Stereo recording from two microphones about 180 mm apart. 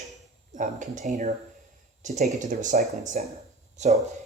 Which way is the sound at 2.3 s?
45° right (ahead or behind).